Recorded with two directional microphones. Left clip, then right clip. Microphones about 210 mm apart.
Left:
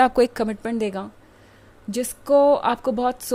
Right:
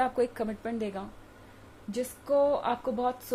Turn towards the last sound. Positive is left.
turn(degrees=45)  # may be behind; listen again after turning